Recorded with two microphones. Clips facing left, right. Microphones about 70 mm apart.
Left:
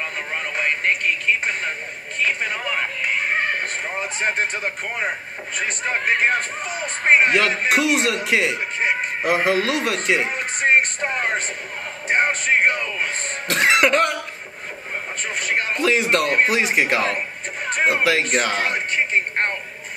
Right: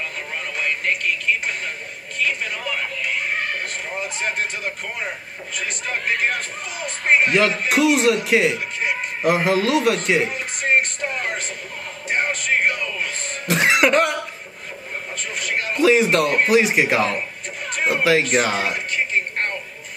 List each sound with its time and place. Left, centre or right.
0.6 s a sound: left
2.1 s speech: left
5.6 s speech: left
7.7 s speech: centre
10.3 s music: left
12.1 s speech: left
13.5 s cough: centre
15.4 s speech: left
15.8 s speech: centre